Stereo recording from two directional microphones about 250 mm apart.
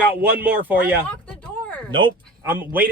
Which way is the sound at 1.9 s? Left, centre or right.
Centre.